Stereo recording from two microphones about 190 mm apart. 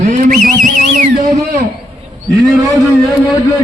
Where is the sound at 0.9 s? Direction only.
40° right (ahead or behind).